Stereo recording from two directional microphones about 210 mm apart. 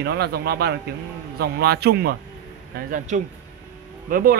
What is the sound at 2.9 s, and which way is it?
A man's voice, 35° right (ahead or behind).